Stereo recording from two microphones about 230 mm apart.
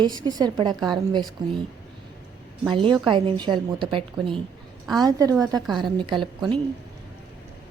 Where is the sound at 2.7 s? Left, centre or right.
Right.